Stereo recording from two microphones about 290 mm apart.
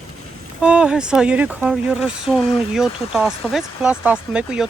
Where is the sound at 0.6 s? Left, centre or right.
Centre.